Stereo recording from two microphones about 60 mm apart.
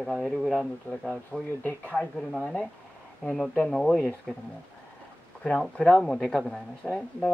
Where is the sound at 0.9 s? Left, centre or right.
Left.